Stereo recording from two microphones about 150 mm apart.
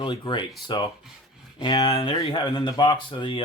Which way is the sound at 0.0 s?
30° left (ahead or behind).